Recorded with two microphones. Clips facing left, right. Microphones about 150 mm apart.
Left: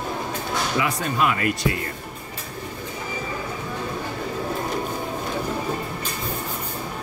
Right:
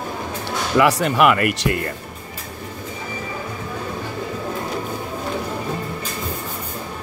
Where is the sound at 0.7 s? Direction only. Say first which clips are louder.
Right 10 dB; 75° right (ahead or behind).